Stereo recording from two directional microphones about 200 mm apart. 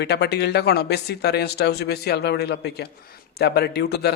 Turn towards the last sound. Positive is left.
turn(degrees=55)  # may be behind; listen again after turning